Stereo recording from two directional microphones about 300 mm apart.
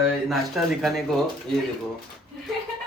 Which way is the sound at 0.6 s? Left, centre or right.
Centre.